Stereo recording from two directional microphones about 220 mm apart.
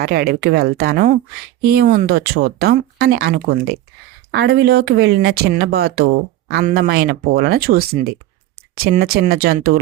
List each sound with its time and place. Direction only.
0.0 s speech: 45° right (ahead or behind)